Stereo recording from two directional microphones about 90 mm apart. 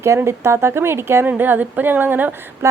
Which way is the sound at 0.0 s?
30° right (ahead or behind).